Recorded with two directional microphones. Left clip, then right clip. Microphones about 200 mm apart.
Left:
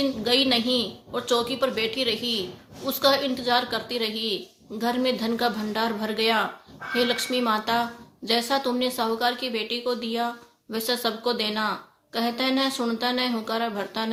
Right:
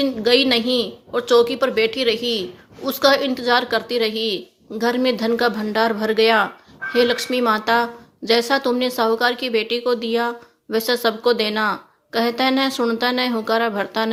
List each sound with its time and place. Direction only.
0.0 s a woman's voice: 40° right (ahead or behind)